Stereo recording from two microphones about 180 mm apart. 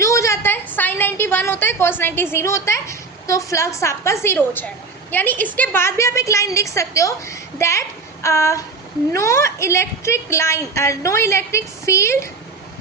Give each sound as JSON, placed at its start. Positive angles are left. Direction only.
{"t": 0.0, "sound": "a woman's voice", "side_deg": 15}